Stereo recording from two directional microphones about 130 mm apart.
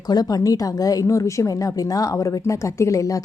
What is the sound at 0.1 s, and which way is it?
Speech, 30° left (ahead or behind).